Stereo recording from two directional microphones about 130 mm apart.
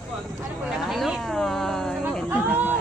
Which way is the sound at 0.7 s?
5° right (ahead or behind).